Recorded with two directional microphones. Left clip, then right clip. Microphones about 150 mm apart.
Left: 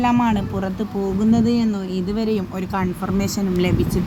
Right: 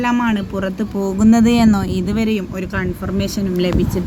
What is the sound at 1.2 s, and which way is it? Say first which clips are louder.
Speech: right 7 dB; 30° right (ahead or behind).